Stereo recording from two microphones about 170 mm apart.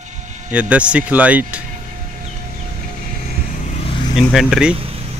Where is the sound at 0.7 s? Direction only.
5° right (ahead or behind).